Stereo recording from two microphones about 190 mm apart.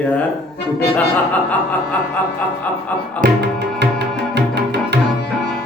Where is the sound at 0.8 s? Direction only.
10° left (ahead or behind).